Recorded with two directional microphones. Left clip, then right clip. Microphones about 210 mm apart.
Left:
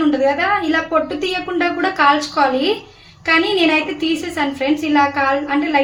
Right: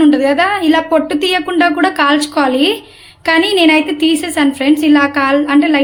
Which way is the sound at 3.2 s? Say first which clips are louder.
Right 4 dB; 45° right (ahead or behind).